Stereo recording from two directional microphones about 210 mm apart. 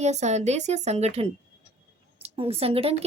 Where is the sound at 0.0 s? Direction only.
30° right (ahead or behind).